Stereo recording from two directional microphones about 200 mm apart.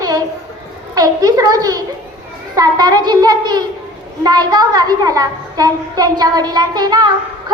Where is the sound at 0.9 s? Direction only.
15° right (ahead or behind).